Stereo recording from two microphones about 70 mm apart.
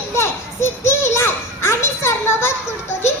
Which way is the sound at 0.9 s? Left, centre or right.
Left.